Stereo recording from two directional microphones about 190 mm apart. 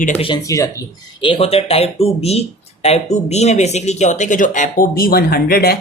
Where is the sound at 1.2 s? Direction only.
30° left (ahead or behind).